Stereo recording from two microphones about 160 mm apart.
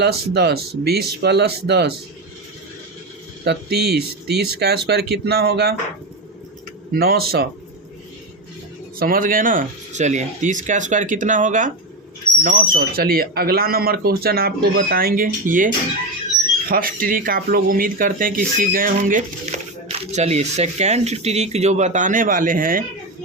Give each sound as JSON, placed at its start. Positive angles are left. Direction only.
{"t": 0.0, "sound": "speech", "side_deg": -90}
{"t": 3.4, "sound": "speech", "side_deg": -90}
{"t": 6.9, "sound": "speech", "side_deg": -70}
{"t": 9.0, "sound": "speech", "side_deg": -65}